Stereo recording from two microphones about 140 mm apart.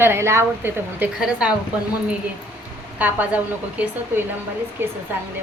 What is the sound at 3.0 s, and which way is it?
A woman's voice, 10° right (ahead or behind).